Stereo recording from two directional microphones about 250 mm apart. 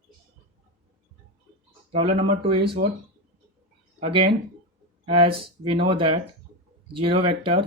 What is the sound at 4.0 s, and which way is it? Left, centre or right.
Speech, right.